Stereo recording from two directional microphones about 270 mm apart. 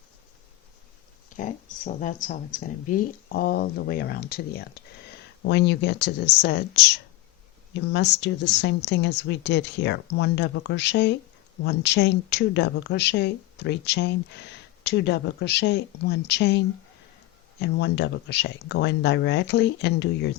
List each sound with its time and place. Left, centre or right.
1.4 s speech: left